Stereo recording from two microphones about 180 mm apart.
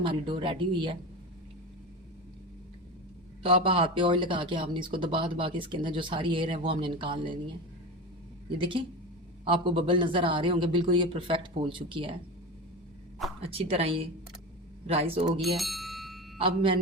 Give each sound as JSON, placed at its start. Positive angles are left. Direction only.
{"t": 0.0, "sound": "speech", "side_deg": -30}
{"t": 3.4, "sound": "speech", "side_deg": -30}
{"t": 8.5, "sound": "speech", "side_deg": -30}
{"t": 13.4, "sound": "speech", "side_deg": -30}
{"t": 15.4, "sound": "bicycle bell", "side_deg": 0}